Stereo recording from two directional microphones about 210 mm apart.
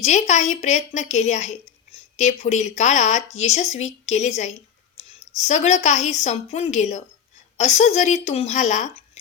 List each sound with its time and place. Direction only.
0.0 s a woman's voice: 35° left (ahead or behind)